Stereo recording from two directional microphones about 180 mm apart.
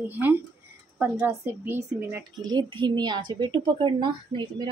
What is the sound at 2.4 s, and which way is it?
Speech, 25° right (ahead or behind).